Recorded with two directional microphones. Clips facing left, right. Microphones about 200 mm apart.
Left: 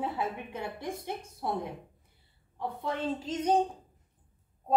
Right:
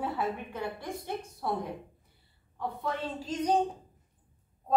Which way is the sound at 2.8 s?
25° left (ahead or behind).